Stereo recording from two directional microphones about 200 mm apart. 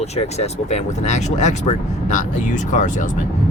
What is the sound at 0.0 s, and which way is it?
Speech, 35° left (ahead or behind).